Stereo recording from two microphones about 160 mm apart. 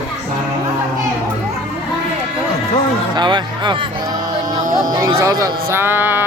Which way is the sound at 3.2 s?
30° right (ahead or behind).